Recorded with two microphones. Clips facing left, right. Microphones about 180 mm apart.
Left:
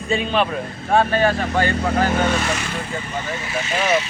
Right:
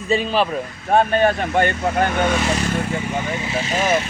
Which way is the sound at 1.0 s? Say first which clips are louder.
Right 1 dB; 20° right (ahead or behind).